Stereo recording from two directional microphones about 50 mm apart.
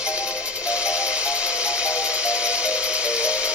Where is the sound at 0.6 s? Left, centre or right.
Centre.